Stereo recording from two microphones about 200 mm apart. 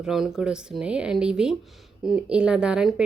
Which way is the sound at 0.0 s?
Centre (ahead or behind).